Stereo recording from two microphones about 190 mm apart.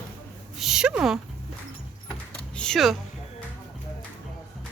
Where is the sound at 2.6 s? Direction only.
Centre (ahead or behind).